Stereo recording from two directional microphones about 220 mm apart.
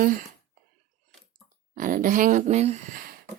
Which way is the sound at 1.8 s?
35° right (ahead or behind).